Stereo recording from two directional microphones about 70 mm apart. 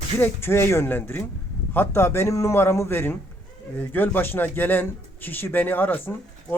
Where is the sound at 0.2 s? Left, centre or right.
Left.